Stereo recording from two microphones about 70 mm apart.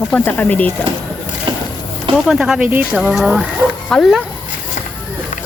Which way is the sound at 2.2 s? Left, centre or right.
Centre.